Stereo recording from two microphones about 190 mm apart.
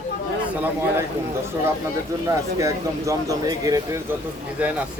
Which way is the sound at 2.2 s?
15° right (ahead or behind).